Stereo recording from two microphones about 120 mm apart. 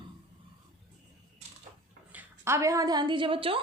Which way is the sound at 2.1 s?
20° right (ahead or behind).